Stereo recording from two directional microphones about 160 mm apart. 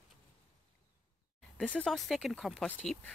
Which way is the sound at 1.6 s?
10° left (ahead or behind).